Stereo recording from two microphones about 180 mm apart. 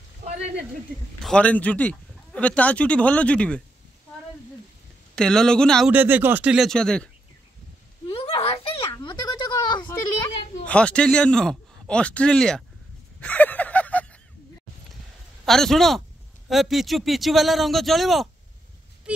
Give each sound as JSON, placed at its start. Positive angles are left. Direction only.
{"t": 1.2, "sound": "speech", "side_deg": 5}
{"t": 5.1, "sound": "a man's voice", "side_deg": 5}
{"t": 5.9, "sound": "speech", "side_deg": -10}
{"t": 8.1, "sound": "a sound", "side_deg": 30}
{"t": 10.6, "sound": "a man's voice", "side_deg": 5}
{"t": 13.2, "sound": "a sound", "side_deg": 10}
{"t": 15.4, "sound": "a man's voice", "side_deg": 0}